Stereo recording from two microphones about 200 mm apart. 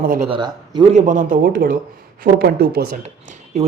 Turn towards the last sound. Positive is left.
turn(degrees=-35)  # may be behind; listen again after turning